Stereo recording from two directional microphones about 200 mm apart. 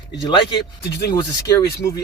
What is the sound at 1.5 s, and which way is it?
Speech, 15° left (ahead or behind).